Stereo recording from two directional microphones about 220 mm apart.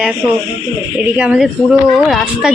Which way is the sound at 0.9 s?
5° right (ahead or behind).